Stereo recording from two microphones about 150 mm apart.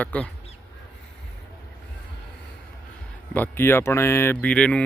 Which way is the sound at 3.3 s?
15° left (ahead or behind).